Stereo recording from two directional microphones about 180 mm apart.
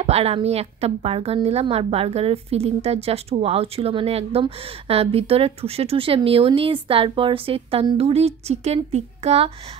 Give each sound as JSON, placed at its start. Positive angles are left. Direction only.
{"t": 0.0, "sound": "a woman's voice", "side_deg": -35}